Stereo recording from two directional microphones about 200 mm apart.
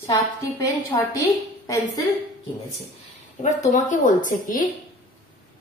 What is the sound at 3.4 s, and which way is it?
Speech, 40° left (ahead or behind).